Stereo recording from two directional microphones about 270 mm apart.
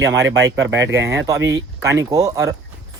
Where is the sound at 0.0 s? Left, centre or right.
Centre.